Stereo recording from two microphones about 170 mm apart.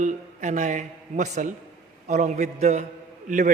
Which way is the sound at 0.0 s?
45° right (ahead or behind).